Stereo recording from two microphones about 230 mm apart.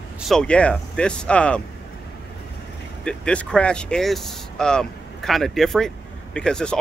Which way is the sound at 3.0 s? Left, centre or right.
Centre.